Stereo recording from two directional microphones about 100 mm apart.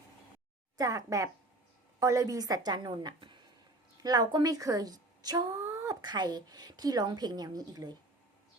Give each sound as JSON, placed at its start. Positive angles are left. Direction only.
{"t": 0.8, "sound": "a woman's voice", "side_deg": -35}
{"t": 5.5, "sound": "a sound", "side_deg": -25}
{"t": 5.9, "sound": "a woman's voice", "side_deg": -45}